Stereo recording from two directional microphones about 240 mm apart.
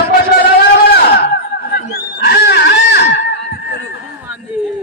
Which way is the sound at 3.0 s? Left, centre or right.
Left.